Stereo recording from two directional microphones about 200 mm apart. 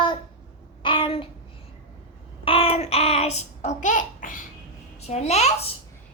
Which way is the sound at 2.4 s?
30° left (ahead or behind).